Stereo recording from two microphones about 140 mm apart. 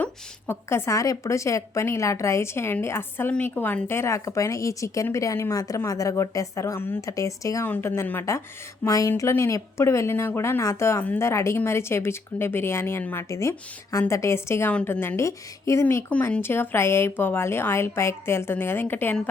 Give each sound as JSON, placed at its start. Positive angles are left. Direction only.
{"t": 0.0, "sound": "a woman's voice", "side_deg": 15}